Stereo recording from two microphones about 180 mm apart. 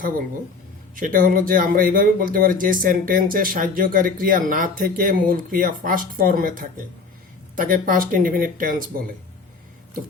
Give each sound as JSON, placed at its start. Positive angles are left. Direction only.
{"t": 0.9, "sound": "speech", "side_deg": -50}